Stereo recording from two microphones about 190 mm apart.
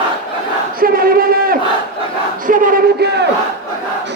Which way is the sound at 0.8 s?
50° right (ahead or behind).